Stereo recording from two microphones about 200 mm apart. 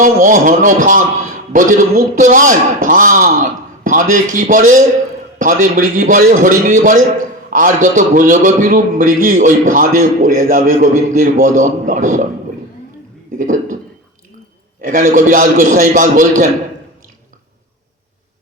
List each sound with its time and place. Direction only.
0.0 s a man's voice: 40° right (ahead or behind)
13.4 s a man's voice: 40° right (ahead or behind)
14.8 s a man's voice: 40° right (ahead or behind)